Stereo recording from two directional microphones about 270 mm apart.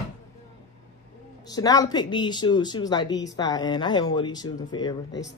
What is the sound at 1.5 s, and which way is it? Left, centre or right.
Speech, centre.